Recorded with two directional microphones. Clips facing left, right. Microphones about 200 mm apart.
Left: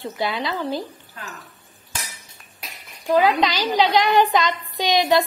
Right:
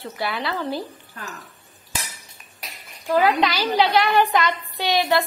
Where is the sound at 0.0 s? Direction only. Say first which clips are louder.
Left 2 dB; 15° left (ahead or behind).